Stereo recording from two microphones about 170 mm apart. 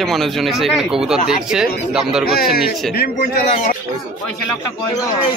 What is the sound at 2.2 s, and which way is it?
Speech, 60° left (ahead or behind).